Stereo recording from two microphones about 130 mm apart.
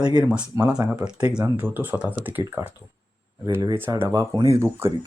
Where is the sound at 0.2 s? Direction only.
5° right (ahead or behind).